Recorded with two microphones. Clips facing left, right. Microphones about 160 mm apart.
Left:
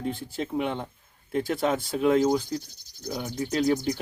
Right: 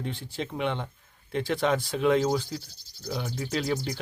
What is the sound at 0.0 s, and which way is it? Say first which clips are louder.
Speech: left 3 dB; 50° left (ahead or behind).